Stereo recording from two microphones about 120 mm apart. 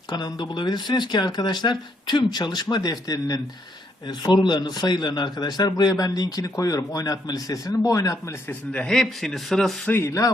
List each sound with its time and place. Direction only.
0.1 s a man's voice: 35° left (ahead or behind)
8.7 s a man's voice: 5° left (ahead or behind)
9.9 s a man's voice: 25° left (ahead or behind)